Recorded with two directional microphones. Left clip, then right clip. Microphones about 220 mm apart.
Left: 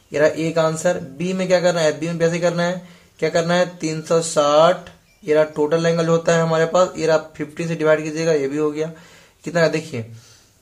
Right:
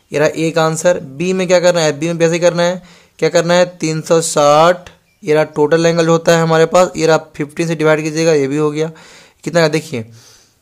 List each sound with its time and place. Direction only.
0.1 s speech: 45° right (ahead or behind)